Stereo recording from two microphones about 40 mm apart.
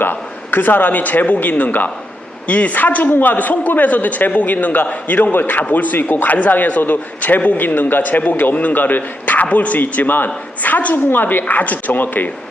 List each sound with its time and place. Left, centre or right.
0.0 s a man's voice: left
10.9 s a man's voice: left